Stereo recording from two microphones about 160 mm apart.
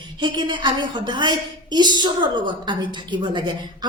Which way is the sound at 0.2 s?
30° right (ahead or behind).